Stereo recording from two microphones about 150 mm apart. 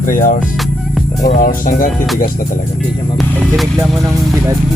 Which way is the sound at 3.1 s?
Centre (ahead or behind).